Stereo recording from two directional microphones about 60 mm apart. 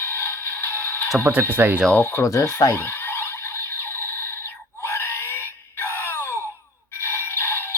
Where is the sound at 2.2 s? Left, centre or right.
Left.